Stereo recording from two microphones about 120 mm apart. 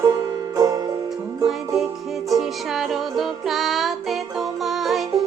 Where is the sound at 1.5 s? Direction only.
Centre (ahead or behind).